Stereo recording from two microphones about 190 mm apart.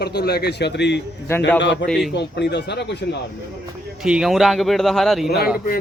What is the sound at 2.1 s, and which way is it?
Speech, 65° left (ahead or behind).